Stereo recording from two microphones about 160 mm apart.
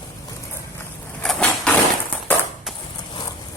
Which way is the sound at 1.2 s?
10° left (ahead or behind).